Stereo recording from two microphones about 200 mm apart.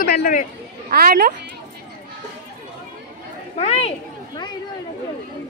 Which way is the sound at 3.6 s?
30° left (ahead or behind).